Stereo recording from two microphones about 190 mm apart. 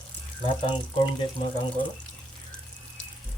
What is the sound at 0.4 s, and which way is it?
Speech, 25° left (ahead or behind).